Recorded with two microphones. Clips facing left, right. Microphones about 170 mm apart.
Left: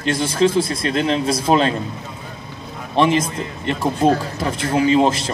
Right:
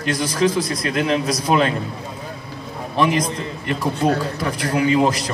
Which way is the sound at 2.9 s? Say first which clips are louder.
Left 2 dB; 25° left (ahead or behind).